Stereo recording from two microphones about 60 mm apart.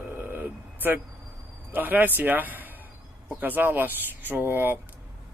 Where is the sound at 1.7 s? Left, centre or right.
Right.